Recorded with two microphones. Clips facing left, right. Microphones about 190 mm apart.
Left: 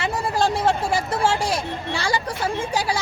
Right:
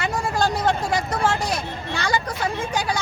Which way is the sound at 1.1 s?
30° left (ahead or behind).